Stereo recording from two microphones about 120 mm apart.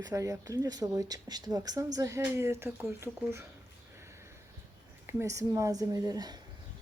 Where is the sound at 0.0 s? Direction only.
25° right (ahead or behind).